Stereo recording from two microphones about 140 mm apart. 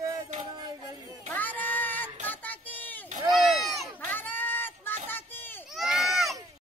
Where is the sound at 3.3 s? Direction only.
Centre (ahead or behind).